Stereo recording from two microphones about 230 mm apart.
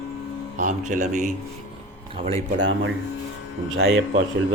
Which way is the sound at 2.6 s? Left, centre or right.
Right.